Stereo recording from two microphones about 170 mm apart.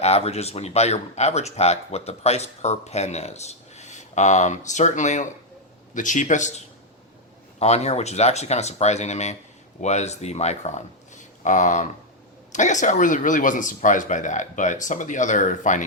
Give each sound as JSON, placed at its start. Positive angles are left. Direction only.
{"t": 0.0, "sound": "speech", "side_deg": 40}
{"t": 7.6, "sound": "speech", "side_deg": 40}